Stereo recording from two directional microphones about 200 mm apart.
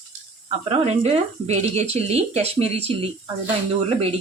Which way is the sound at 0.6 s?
30° right (ahead or behind).